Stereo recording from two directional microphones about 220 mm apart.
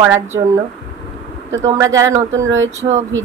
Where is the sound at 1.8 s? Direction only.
15° right (ahead or behind).